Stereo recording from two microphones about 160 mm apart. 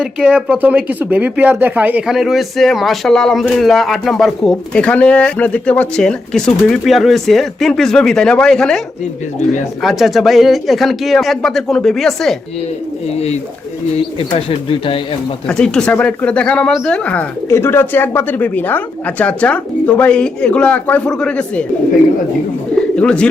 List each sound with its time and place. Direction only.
0.0 s speech: 5° right (ahead or behind)
9.8 s speech: centre (ahead or behind)
13.1 s speech: 40° left (ahead or behind)
15.4 s speech: 5° left (ahead or behind)
23.0 s speech: 5° left (ahead or behind)